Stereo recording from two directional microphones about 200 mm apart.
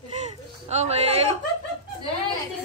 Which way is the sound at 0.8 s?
30° right (ahead or behind).